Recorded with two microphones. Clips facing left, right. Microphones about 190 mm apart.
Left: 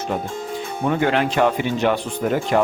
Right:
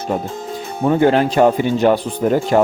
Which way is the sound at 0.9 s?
30° right (ahead or behind).